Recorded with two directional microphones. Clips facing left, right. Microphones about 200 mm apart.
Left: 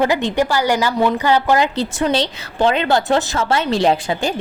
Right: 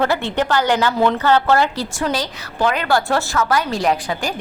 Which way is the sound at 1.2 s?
15° left (ahead or behind).